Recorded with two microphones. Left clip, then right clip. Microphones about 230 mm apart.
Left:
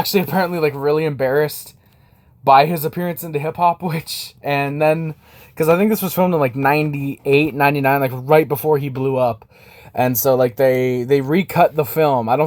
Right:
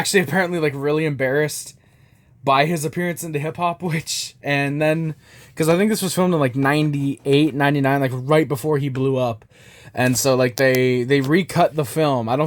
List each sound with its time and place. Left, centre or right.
0.0 s speech: right
5.5 s speech: right